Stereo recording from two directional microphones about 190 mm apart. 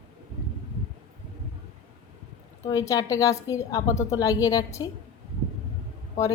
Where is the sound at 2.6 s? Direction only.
20° left (ahead or behind).